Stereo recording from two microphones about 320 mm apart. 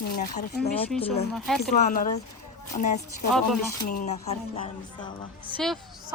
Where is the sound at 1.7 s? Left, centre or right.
Left.